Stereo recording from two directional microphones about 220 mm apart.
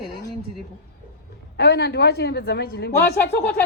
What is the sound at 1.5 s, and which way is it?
A man's voice, 50° left (ahead or behind).